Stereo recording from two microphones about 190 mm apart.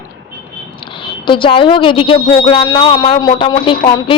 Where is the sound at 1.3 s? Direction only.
25° left (ahead or behind).